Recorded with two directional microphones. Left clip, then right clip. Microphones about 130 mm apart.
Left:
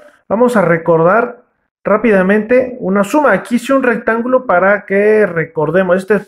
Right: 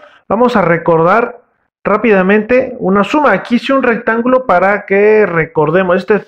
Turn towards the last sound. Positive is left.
turn(degrees=-10)  # may be behind; listen again after turning